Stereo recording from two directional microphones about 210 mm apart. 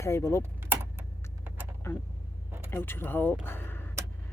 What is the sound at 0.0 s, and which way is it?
Speech, 15° left (ahead or behind).